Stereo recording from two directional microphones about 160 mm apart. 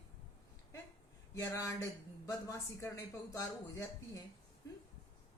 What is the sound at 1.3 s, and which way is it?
A man's voice, 20° left (ahead or behind).